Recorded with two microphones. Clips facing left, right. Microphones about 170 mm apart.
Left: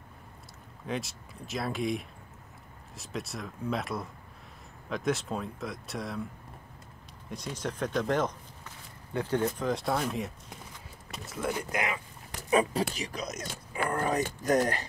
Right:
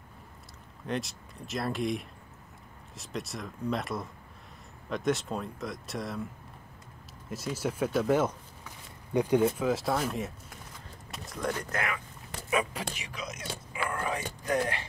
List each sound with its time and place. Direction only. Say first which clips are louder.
0.8 s speech: right 1 dB; centre (ahead or behind)
7.2 s speech: right 3 dB; 5° right (ahead or behind)
9.6 s speech: right 1 dB; 5° right (ahead or behind); by 12.0 s 15° left (ahead or behind)
12.4 s speech: left 5 dB; 35° left (ahead or behind)